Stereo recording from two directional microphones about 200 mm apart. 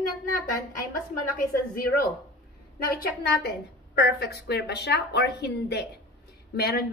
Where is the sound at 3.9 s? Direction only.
55° left (ahead or behind).